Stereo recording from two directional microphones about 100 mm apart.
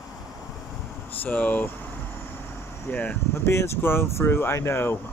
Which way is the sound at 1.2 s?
15° left (ahead or behind).